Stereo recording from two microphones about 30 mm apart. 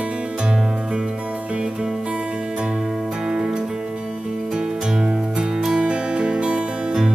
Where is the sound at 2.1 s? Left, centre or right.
Right.